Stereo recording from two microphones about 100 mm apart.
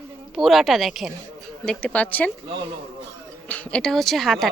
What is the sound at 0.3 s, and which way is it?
Speech, centre (ahead or behind).